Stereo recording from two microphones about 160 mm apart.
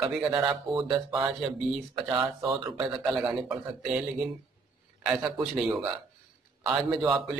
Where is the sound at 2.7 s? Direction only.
5° right (ahead or behind).